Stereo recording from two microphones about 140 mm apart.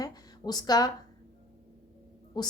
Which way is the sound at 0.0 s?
30° left (ahead or behind).